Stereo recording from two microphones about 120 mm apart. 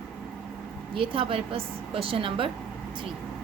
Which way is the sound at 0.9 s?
50° right (ahead or behind).